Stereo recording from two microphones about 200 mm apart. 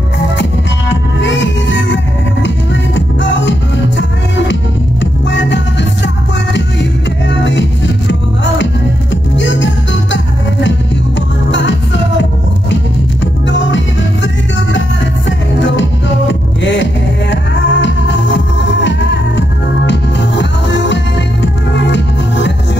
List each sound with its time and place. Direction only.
0.4 s music: 65° left (ahead or behind)
5.3 s music: 65° left (ahead or behind)
11.5 s music: 65° left (ahead or behind)